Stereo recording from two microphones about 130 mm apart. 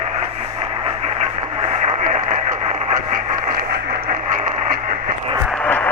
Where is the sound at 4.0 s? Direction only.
90° right.